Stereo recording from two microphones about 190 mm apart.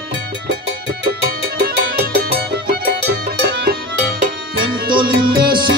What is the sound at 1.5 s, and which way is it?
Music, 55° right (ahead or behind).